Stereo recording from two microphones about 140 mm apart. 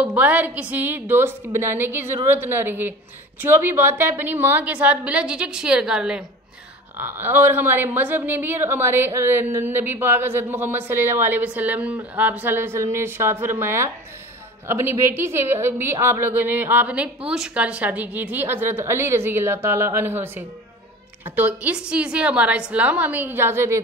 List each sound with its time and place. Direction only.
0.0 s a woman's voice: 10° right (ahead or behind)